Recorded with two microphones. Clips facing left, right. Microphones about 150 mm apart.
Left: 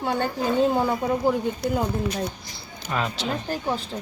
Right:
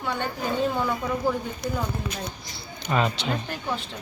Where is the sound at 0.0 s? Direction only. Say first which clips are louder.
Left 4 dB; 35° left (ahead or behind).